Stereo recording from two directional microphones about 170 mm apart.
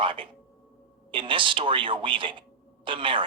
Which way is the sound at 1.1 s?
30° right (ahead or behind).